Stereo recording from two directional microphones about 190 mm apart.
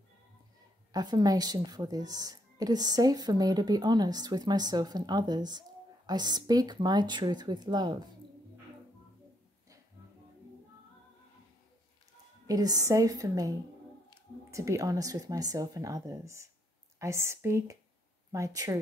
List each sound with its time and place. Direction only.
0.9 s speech: 20° right (ahead or behind)
12.4 s speech: 20° right (ahead or behind)